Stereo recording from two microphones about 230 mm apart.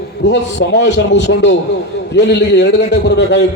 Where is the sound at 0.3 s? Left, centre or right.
Left.